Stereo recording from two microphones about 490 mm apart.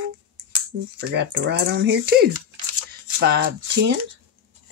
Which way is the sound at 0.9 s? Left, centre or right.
Right.